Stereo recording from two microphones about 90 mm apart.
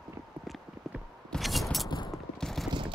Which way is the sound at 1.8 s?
55° left (ahead or behind).